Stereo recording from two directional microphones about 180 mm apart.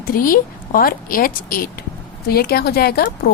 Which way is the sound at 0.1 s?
50° left (ahead or behind).